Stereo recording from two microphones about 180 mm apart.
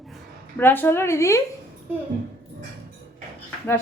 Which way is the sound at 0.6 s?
10° left (ahead or behind).